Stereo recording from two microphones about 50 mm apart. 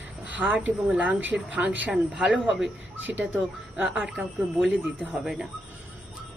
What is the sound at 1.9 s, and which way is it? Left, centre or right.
Speech, right.